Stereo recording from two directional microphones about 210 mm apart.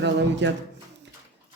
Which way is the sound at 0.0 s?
55° right (ahead or behind).